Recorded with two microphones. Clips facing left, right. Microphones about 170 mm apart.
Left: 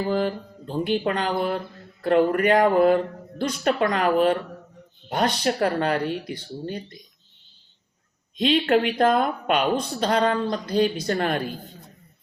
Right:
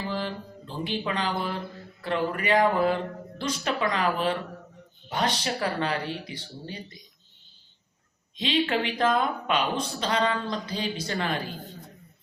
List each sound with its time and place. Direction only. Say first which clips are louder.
0.0 s speech: left 8 dB; 45° left (ahead or behind)
8.4 s speech: left 6 dB; 50° left (ahead or behind)